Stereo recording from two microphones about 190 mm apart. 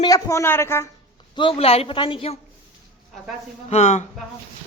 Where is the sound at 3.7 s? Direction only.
40° left (ahead or behind).